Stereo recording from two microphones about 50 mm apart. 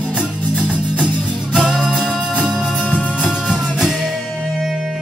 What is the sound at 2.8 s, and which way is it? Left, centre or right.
Music, left.